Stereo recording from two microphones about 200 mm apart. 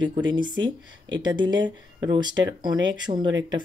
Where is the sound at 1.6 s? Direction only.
65° right (ahead or behind).